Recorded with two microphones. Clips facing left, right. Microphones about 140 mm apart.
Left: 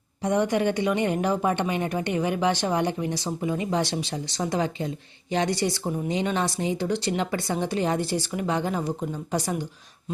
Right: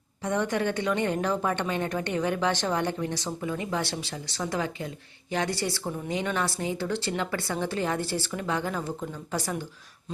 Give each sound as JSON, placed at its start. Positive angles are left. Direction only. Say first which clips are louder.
{"t": 0.2, "sound": "a woman's voice", "louder": "left 4 dB", "side_deg": 15}